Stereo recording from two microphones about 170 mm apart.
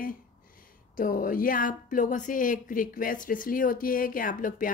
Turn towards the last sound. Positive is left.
turn(degrees=55)  # may be behind; listen again after turning